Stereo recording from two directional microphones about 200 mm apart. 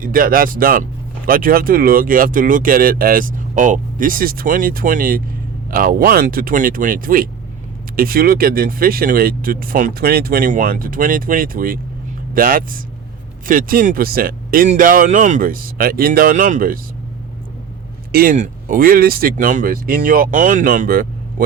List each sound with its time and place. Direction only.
0.0 s speech: 45° right (ahead or behind)
18.1 s speech: 45° right (ahead or behind)